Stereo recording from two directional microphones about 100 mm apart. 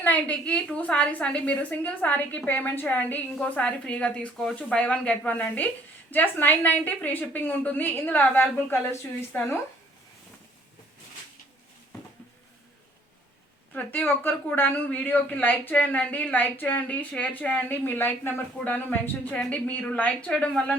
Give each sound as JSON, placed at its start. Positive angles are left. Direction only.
{"t": 0.0, "sound": "a woman's voice", "side_deg": 15}
{"t": 13.7, "sound": "a woman's voice", "side_deg": 20}